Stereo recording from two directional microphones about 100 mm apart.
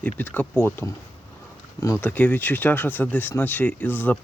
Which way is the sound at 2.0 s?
15° left (ahead or behind).